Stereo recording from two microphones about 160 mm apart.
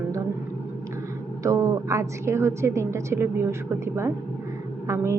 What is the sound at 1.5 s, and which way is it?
A woman's voice, 20° right (ahead or behind).